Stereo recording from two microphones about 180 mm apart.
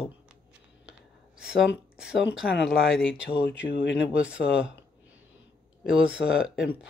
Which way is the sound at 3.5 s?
70° left (ahead or behind).